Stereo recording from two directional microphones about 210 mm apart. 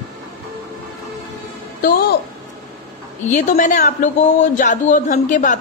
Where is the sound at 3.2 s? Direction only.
35° left (ahead or behind).